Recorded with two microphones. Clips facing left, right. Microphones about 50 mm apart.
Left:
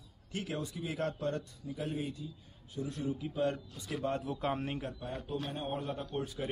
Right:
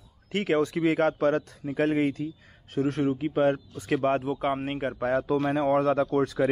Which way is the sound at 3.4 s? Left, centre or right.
Right.